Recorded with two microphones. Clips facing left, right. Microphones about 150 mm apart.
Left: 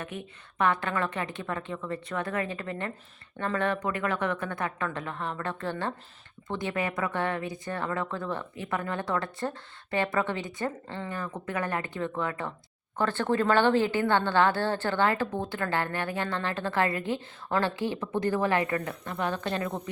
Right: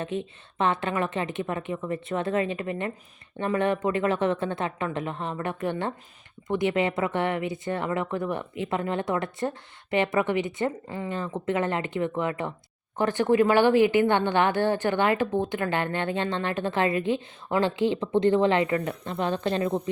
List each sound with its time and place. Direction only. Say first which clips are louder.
0.0 s speech: right 7 dB; 25° right (ahead or behind)
11.1 s speech: right 7 dB; 20° right (ahead or behind)